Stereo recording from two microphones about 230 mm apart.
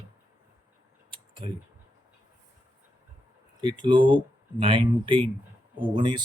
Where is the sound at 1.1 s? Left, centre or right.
Right.